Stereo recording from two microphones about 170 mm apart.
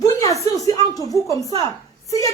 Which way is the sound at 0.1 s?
20° left (ahead or behind).